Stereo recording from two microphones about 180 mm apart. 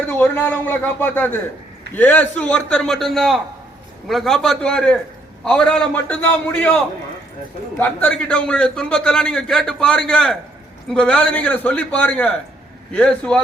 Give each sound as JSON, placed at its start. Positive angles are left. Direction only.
{"t": 0.1, "sound": "a man's voice", "side_deg": 10}
{"t": 7.8, "sound": "a man's voice", "side_deg": 10}